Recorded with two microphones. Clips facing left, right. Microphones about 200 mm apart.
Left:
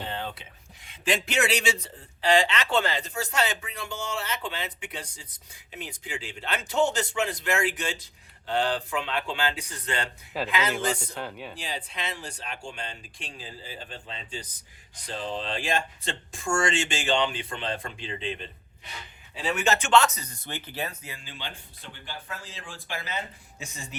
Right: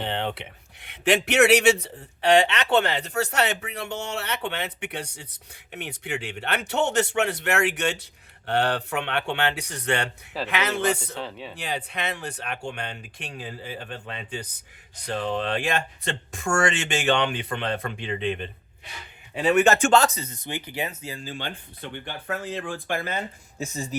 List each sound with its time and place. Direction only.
0.0 s speech: 70° right (ahead or behind)
11.1 s speech: centre (ahead or behind)
11.5 s speech: 60° right (ahead or behind); by 20.9 s 15° right (ahead or behind)
21.0 s speech: 35° right (ahead or behind)